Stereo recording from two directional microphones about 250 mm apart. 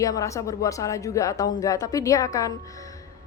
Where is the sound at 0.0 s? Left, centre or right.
Centre.